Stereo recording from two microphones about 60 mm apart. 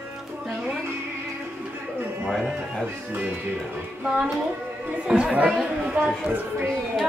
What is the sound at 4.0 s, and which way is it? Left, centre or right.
A woman's voice, centre.